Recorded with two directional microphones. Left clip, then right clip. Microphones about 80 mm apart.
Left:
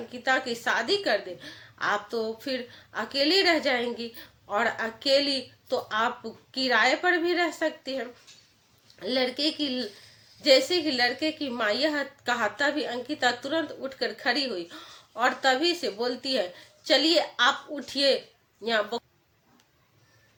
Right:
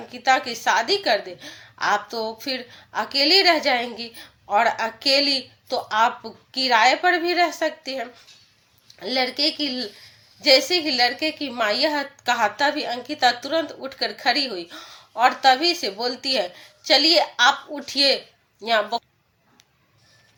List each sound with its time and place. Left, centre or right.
0.1 s a woman's voice: left
9.0 s a woman's voice: left